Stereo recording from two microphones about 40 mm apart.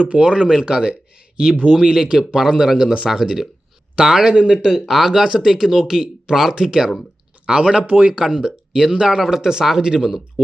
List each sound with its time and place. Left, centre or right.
0.0 s speech: right
4.9 s speech: centre; by 7.9 s right
8.1 s speech: centre